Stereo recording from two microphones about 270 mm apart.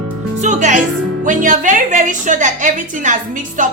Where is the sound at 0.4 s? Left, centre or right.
Right.